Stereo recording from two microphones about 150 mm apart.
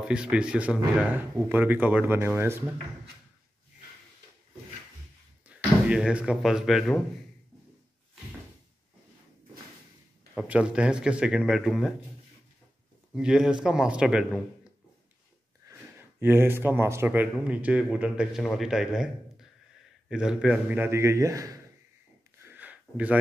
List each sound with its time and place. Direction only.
0.0 s speech: 5° right (ahead or behind)
5.5 s speech: 5° right (ahead or behind)
10.3 s speech: 10° right (ahead or behind)
13.1 s speech: 5° right (ahead or behind)
15.6 s speech: 15° right (ahead or behind)
20.1 s speech: 5° right (ahead or behind); by 21.5 s 20° right (ahead or behind)
22.4 s a sound: 10° right (ahead or behind)